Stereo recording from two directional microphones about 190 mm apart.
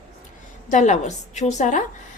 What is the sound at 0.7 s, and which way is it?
A woman's voice, 40° left (ahead or behind).